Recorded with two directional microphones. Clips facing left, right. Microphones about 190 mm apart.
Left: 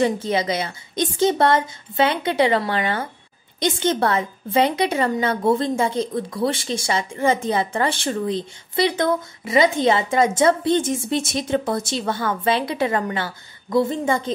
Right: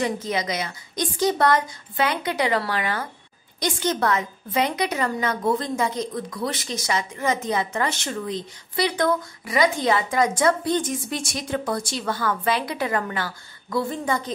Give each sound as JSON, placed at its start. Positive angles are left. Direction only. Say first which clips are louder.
{"t": 0.0, "sound": "a woman's voice", "louder": "left 5 dB", "side_deg": 30}